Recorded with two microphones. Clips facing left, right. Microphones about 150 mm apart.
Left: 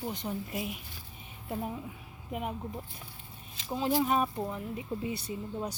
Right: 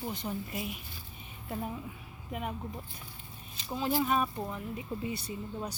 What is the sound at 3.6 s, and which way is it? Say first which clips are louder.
Speech: left 2 dB; 20° left (ahead or behind).